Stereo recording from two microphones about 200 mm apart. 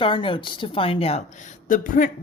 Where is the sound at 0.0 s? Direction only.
25° left (ahead or behind).